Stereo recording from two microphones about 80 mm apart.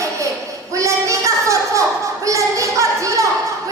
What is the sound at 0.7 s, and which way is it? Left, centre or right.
Child singing, right.